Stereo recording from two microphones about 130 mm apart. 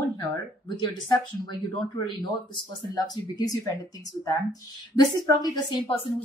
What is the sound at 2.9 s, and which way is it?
A woman's voice, 30° left (ahead or behind).